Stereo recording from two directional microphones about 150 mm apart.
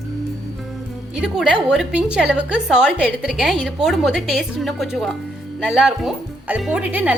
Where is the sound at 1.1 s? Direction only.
5° right (ahead or behind).